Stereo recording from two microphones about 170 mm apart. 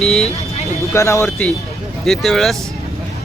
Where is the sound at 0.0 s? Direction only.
Centre (ahead or behind).